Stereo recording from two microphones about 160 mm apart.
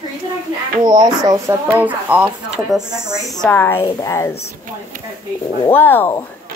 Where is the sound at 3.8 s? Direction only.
30° left (ahead or behind).